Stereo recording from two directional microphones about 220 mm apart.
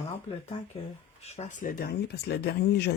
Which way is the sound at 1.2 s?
30° left (ahead or behind).